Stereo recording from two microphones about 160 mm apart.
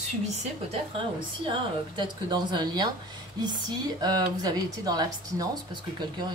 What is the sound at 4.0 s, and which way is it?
Speech, 25° right (ahead or behind).